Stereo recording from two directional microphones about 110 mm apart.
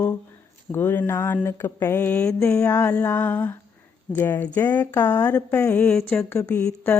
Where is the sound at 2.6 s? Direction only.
25° left (ahead or behind); by 6.2 s 5° left (ahead or behind).